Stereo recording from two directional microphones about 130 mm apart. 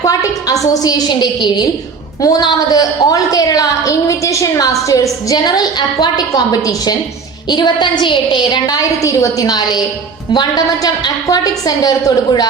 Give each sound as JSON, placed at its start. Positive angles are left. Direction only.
{"t": 0.0, "sound": "a woman's voice", "side_deg": 25}